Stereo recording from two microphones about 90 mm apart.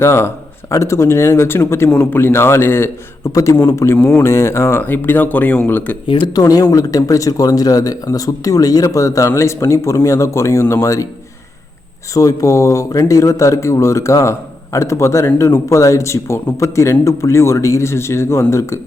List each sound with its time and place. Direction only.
0.0 s a man's voice: 30° left (ahead or behind)
6.2 s a man's voice: 50° left (ahead or behind)
12.1 s a man's voice: 40° left (ahead or behind)